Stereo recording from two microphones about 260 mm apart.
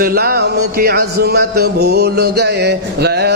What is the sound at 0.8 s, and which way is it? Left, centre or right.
Music, right.